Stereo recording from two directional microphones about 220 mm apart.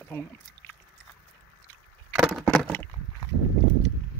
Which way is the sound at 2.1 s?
10° right (ahead or behind).